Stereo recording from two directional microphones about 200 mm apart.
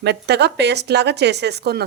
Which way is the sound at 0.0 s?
55° right (ahead or behind).